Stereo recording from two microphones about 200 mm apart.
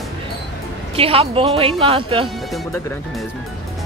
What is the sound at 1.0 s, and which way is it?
A woman's voice, 30° right (ahead or behind).